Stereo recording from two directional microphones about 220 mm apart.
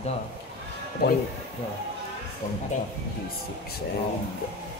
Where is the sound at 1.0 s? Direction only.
45° left (ahead or behind).